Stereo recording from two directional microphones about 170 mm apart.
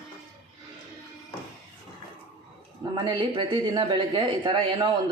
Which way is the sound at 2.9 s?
25° right (ahead or behind).